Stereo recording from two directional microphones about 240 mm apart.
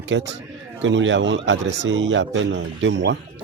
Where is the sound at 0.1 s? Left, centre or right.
Right.